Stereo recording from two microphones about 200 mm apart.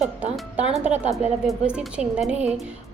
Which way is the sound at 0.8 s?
35° right (ahead or behind).